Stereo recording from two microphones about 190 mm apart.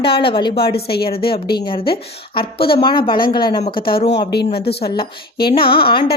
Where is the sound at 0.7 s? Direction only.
55° left (ahead or behind).